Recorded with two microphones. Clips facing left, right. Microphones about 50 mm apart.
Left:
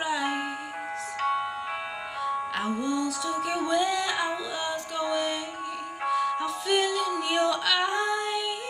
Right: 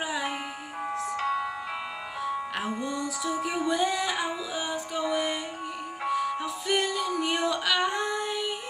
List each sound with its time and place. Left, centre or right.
0.1 s music: centre
1.2 s music: left
2.2 s music: centre